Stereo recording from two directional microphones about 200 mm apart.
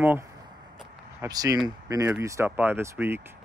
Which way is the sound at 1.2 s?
20° right (ahead or behind).